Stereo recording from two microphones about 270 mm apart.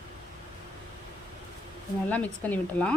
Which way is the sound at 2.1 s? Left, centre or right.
Centre.